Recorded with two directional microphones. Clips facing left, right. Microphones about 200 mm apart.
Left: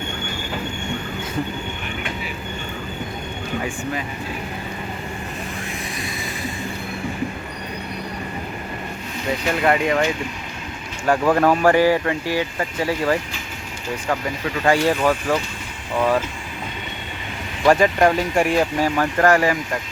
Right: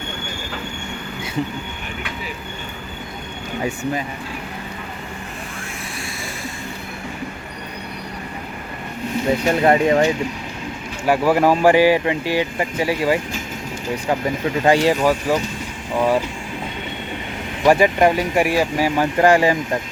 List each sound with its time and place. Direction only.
9.6 s speech: 30° right (ahead or behind)
11.0 s speech: 5° right (ahead or behind)
15.3 s speech: 5° right (ahead or behind)
17.6 s speech: 10° right (ahead or behind)
18.9 s speech: 15° right (ahead or behind)